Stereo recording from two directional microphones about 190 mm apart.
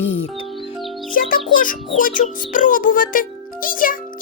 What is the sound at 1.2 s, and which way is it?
Speech, 45° left (ahead or behind).